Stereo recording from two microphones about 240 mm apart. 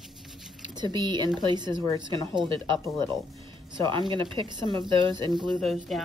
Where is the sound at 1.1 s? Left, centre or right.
Centre.